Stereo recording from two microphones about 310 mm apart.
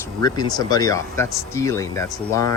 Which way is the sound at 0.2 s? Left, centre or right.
Centre.